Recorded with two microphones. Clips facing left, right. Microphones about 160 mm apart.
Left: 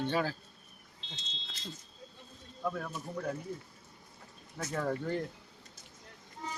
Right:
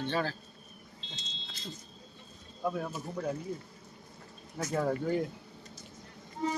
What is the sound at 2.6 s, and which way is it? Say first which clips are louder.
Speech: right 3 dB; 20° right (ahead or behind).